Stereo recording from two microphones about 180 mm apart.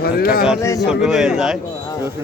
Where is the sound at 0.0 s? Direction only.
55° left (ahead or behind).